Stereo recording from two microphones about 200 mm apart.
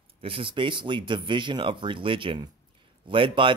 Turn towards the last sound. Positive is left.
turn(degrees=-25)  # may be behind; listen again after turning